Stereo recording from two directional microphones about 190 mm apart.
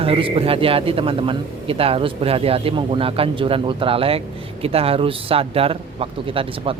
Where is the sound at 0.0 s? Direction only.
30° right (ahead or behind).